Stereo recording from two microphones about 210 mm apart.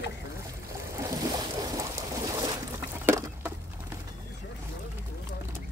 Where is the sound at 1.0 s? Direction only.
15° right (ahead or behind).